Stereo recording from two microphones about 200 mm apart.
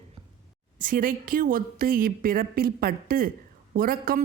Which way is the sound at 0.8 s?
45° right (ahead or behind).